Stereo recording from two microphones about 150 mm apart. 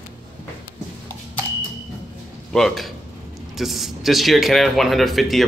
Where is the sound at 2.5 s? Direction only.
Centre (ahead or behind).